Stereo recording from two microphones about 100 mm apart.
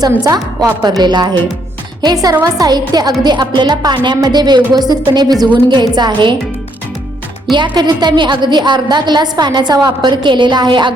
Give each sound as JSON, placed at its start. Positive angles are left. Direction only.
{"t": 0.3, "sound": "a woman's voice", "side_deg": -35}
{"t": 7.5, "sound": "a woman's voice", "side_deg": -50}